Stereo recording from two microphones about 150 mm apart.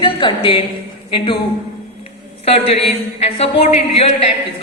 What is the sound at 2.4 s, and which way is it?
Speech, 45° left (ahead or behind).